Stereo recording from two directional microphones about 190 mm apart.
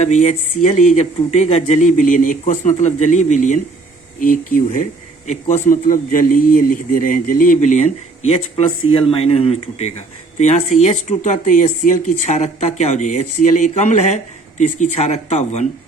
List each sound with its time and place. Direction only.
0.0 s a man's voice: 35° left (ahead or behind)